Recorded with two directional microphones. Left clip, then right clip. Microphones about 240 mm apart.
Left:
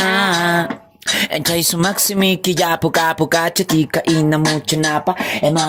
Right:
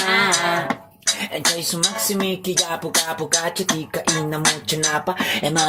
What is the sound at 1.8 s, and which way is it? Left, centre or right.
Speech, left.